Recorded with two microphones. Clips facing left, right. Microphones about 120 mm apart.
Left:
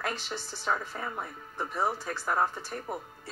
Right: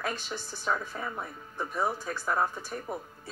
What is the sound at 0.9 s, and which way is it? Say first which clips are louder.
Speech: even; 5° left (ahead or behind).